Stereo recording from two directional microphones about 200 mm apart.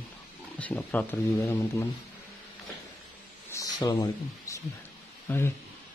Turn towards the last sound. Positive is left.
turn(degrees=10)  # may be behind; listen again after turning